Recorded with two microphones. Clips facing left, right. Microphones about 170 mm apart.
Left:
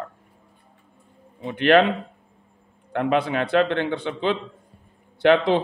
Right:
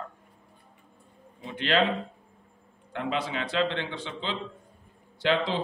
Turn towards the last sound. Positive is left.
turn(degrees=60)  # may be behind; listen again after turning